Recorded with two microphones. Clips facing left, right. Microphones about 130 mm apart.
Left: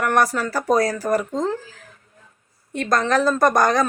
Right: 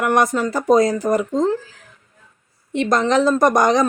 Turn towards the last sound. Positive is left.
turn(degrees=-20)  # may be behind; listen again after turning